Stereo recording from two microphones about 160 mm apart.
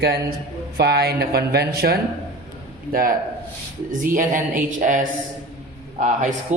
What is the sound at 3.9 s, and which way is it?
Speech, 60° right (ahead or behind).